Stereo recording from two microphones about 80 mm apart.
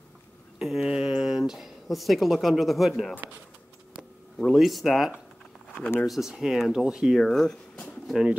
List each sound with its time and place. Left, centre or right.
0.6 s speech: centre
3.2 s speech: right
4.5 s speech: centre
8.1 s speech: centre